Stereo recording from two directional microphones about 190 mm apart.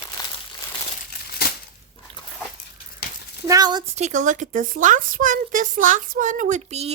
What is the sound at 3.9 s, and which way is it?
Speech, 40° right (ahead or behind).